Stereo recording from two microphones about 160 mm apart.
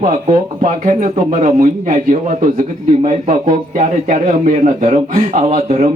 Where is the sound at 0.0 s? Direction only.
50° right (ahead or behind).